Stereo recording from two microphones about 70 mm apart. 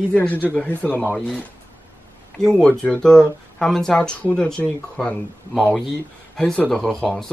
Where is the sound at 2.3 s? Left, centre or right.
Centre.